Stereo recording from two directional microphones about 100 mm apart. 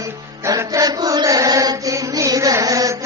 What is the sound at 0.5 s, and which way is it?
Chant, 35° right (ahead or behind).